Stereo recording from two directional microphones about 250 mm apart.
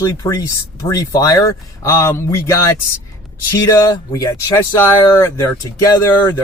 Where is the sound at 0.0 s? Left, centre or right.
Centre.